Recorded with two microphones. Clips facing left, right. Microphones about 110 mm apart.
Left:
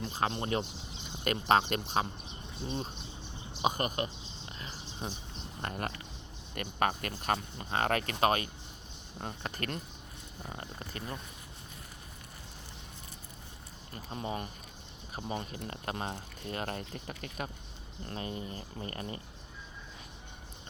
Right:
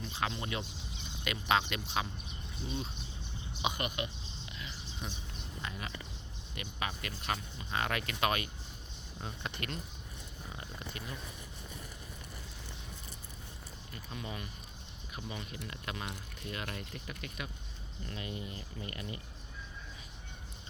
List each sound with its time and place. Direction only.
0.0 s speech: 40° left (ahead or behind)
3.6 s a sound: 40° left (ahead or behind)
5.6 s speech: 50° left (ahead or behind)
13.9 s speech: 35° left (ahead or behind)